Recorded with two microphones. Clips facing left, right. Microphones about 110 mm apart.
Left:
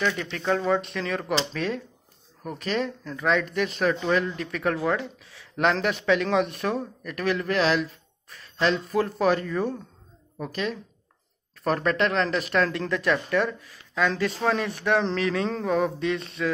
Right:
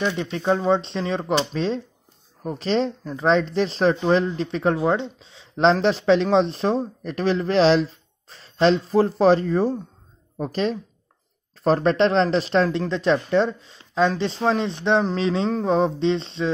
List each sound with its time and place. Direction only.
0.0 s speech: 25° right (ahead or behind)